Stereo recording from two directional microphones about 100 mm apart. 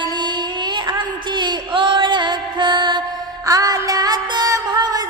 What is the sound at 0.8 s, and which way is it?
Music, 50° right (ahead or behind).